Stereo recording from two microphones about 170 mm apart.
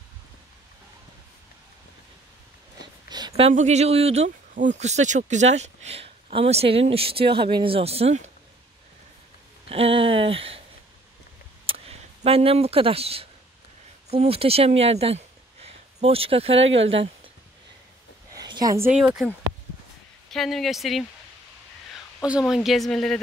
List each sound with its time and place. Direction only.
3.1 s speech: 25° right (ahead or behind)
9.7 s speech: 35° right (ahead or behind)
11.6 s a sound: 35° right (ahead or behind)
14.1 s speech: 35° right (ahead or behind)
18.3 s a sound: 25° right (ahead or behind)
18.9 s speech: 5° right (ahead or behind)
22.2 s speech: 5° right (ahead or behind)